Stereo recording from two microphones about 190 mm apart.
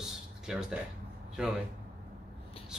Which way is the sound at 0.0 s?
5° right (ahead or behind).